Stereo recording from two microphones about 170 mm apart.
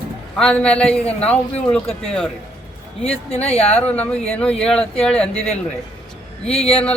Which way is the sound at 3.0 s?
35° left (ahead or behind).